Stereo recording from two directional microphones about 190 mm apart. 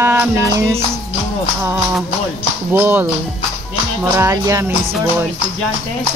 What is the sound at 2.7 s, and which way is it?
Speech, 10° right (ahead or behind).